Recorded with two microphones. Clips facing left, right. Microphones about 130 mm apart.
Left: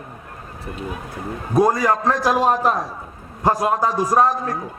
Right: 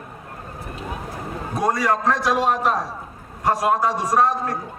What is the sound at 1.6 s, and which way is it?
A man's voice, 30° left (ahead or behind).